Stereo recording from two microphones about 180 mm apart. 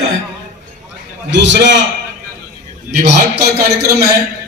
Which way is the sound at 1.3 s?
80° right.